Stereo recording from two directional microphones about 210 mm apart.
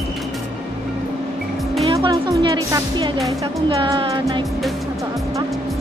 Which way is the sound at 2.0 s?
20° right (ahead or behind).